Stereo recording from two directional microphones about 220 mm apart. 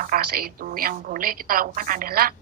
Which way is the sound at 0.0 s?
40° right (ahead or behind).